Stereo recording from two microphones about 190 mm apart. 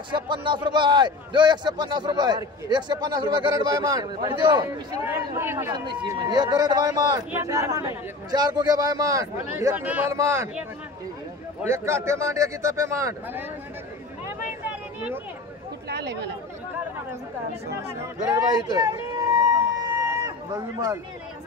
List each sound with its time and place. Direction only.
0.1 s a man's voice: 25° right (ahead or behind)
5.0 s a man's voice: 15° right (ahead or behind)
5.9 s a man's voice: 25° right (ahead or behind)
11.6 s a man's voice: 15° right (ahead or behind)
15.9 s chatter: 60° right (ahead or behind)
18.3 s a sound: 20° right (ahead or behind)